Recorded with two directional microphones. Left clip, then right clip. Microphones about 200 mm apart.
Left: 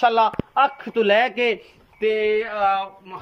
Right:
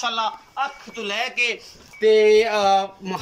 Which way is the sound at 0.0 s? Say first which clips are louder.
Left 7 dB; 45° left (ahead or behind).